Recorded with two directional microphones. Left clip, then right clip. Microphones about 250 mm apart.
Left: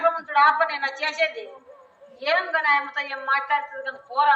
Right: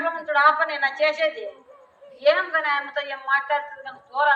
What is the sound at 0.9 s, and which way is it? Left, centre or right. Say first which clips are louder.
A woman's voice: right 3 dB; left.